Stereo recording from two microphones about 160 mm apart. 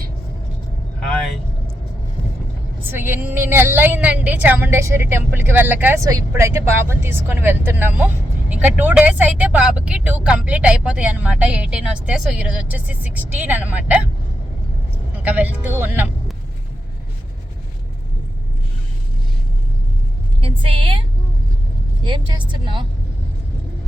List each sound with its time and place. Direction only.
0.9 s vehicle: 5° left (ahead or behind)
2.9 s a woman's voice: 15° right (ahead or behind)
15.2 s a woman's voice: 10° right (ahead or behind)
20.4 s a woman's voice: 35° right (ahead or behind)
22.0 s a woman's voice: 30° right (ahead or behind)